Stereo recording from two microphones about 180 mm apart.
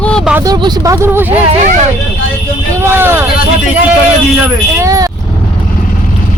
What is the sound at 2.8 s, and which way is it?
Speech, 15° right (ahead or behind).